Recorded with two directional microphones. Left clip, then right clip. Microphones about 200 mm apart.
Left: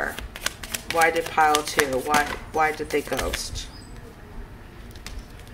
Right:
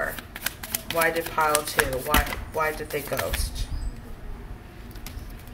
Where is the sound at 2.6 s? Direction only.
50° left (ahead or behind).